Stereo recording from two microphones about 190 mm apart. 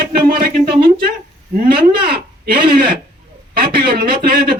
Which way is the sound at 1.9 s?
55° right (ahead or behind).